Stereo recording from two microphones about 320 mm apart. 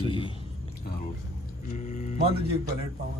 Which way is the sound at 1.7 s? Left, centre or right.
Left.